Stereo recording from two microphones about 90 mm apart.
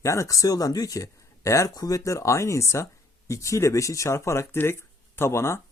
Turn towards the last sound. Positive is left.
turn(degrees=30)  # may be behind; listen again after turning